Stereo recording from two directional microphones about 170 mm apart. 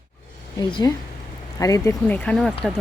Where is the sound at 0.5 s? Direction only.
20° left (ahead or behind).